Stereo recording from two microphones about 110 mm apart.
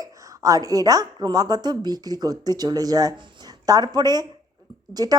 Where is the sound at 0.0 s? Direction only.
30° right (ahead or behind).